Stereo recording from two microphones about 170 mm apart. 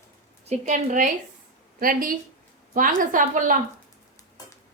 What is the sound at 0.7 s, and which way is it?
A woman's voice, 45° right (ahead or behind).